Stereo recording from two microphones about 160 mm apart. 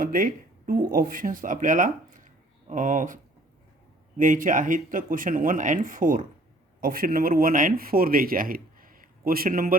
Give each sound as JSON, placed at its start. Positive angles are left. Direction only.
{"t": 0.0, "sound": "speech", "side_deg": -60}
{"t": 4.2, "sound": "speech", "side_deg": -55}